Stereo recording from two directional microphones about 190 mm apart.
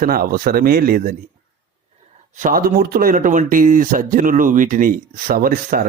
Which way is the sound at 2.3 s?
45° right (ahead or behind).